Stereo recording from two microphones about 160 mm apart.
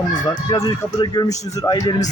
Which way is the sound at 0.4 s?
30° left (ahead or behind).